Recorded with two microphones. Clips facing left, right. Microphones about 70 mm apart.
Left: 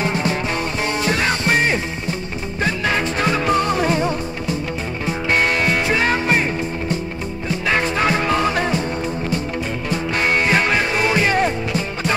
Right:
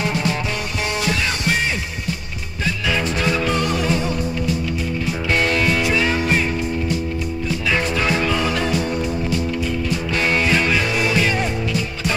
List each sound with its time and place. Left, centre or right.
0.1 s music: left
7.4 s music: left
9.8 s music: left